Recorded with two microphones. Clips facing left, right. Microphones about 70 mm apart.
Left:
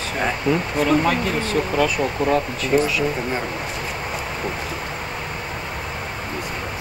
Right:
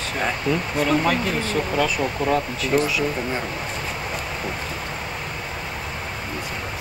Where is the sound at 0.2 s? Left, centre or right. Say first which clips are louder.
Left 2 dB; centre.